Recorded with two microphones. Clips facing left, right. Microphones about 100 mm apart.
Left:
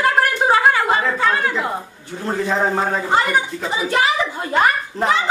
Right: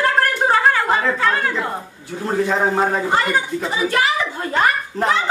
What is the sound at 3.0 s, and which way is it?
A woman's voice, 15° left (ahead or behind).